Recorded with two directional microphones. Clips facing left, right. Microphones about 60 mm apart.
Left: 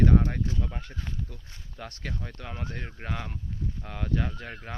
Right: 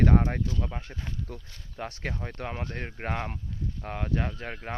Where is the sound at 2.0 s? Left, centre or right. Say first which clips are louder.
Right 2 dB; right.